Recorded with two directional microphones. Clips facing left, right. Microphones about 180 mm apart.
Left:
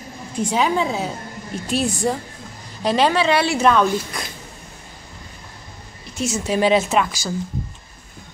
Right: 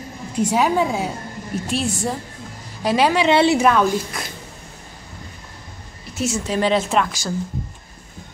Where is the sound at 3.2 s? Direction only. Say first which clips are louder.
Right 4 dB; 20° right (ahead or behind).